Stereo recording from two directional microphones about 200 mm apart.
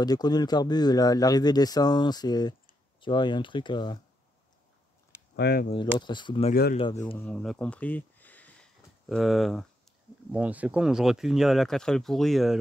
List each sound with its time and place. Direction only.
0.0 s speech: 20° left (ahead or behind)
5.3 s speech: 50° left (ahead or behind)
5.7 s speech: 25° left (ahead or behind)
6.5 s speech: 50° left (ahead or behind)
7.2 s speech: 5° left (ahead or behind)